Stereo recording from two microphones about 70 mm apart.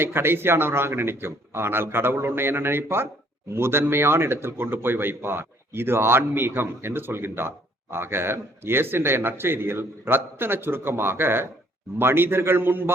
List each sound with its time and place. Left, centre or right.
0.0 s speech: right